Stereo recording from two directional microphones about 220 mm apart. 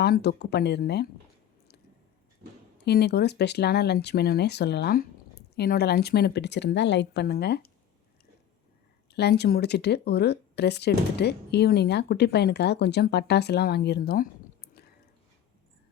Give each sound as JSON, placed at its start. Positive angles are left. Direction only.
{"t": 0.0, "sound": "speech", "side_deg": 45}
{"t": 2.7, "sound": "speech", "side_deg": 45}
{"t": 9.0, "sound": "speech", "side_deg": 50}